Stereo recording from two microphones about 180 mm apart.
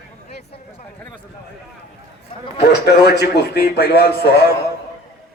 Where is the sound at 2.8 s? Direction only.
65° left (ahead or behind).